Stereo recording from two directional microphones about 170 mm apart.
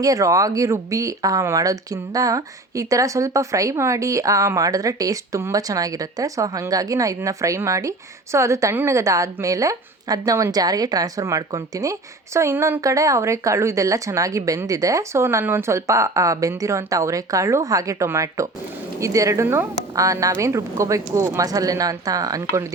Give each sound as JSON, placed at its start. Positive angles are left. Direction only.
{"t": 0.0, "sound": "speech", "side_deg": -20}